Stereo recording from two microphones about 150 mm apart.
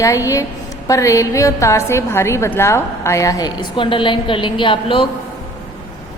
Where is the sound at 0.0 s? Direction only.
20° left (ahead or behind).